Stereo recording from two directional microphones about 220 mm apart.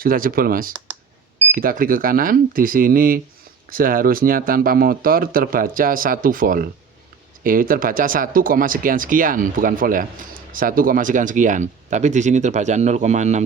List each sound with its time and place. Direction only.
0.0 s speech: 40° right (ahead or behind)